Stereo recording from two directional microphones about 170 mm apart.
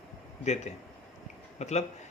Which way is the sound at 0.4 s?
40° left (ahead or behind).